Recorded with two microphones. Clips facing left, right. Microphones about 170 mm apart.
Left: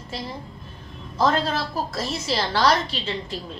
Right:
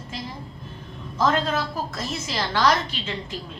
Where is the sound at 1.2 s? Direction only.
35° left (ahead or behind).